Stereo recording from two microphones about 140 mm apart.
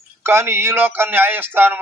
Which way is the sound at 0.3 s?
15° right (ahead or behind).